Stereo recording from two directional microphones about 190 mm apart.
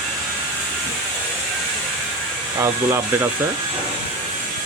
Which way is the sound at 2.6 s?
15° right (ahead or behind).